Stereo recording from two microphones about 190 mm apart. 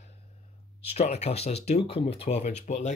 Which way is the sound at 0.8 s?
35° left (ahead or behind).